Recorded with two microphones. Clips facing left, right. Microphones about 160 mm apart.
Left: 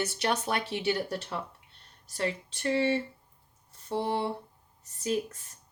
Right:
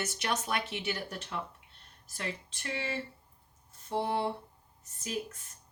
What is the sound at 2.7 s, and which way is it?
Speech, 30° left (ahead or behind).